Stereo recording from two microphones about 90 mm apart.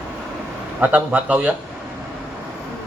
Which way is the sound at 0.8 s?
15° right (ahead or behind).